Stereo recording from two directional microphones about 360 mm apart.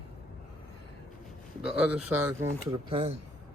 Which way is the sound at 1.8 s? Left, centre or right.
Centre.